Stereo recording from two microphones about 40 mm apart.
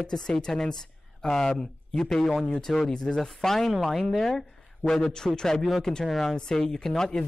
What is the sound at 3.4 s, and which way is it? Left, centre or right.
Speech, centre.